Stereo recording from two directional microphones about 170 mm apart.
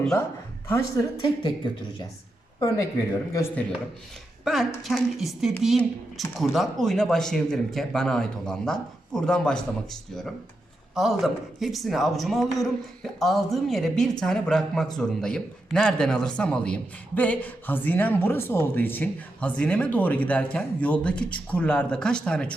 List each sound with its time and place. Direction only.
0.7 s speech: 20° left (ahead or behind)
2.6 s speech: 20° left (ahead or behind)
4.4 s a man's voice: centre (ahead or behind)
10.9 s a man's voice: centre (ahead or behind)